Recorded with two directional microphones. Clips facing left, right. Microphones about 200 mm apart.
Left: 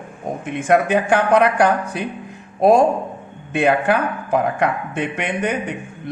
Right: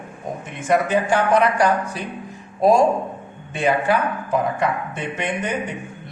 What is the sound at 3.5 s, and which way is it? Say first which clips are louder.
Speech: left 3 dB; 60° left (ahead or behind).